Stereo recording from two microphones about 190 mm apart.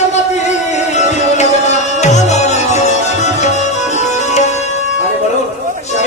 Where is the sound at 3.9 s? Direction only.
35° left (ahead or behind).